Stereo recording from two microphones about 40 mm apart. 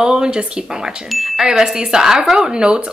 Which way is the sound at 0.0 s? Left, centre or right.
Centre.